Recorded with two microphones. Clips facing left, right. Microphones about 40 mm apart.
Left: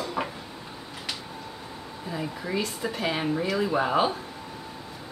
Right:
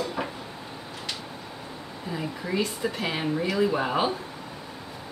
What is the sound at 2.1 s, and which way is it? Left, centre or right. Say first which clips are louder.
Speech: right 1 dB; centre.